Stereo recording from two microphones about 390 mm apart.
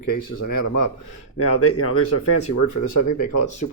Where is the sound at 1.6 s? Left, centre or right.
Left.